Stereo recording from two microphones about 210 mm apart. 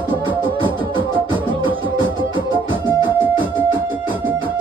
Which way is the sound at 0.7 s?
25° right (ahead or behind).